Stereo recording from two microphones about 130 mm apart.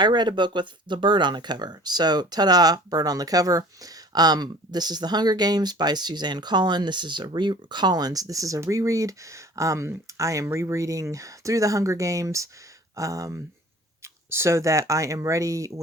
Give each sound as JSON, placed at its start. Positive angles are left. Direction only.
{"t": 0.0, "sound": "speech", "side_deg": -35}